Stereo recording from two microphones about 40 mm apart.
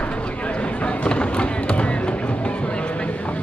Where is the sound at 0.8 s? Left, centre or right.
Left.